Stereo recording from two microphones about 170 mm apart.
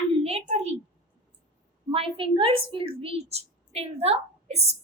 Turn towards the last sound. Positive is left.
turn(degrees=-40)  # may be behind; listen again after turning